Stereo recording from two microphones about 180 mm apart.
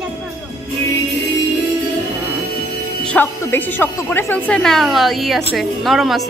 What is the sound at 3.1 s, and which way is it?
Speech, 10° left (ahead or behind).